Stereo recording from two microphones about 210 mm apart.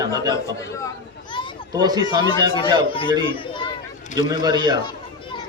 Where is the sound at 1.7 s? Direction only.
20° right (ahead or behind).